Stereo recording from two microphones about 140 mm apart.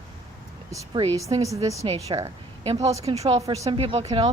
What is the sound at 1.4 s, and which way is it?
Speech, 25° right (ahead or behind).